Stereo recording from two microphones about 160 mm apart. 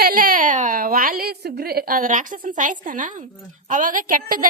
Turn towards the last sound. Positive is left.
turn(degrees=-60)  # may be behind; listen again after turning